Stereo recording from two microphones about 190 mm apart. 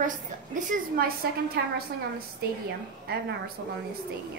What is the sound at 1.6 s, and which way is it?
Speech, 60° right (ahead or behind).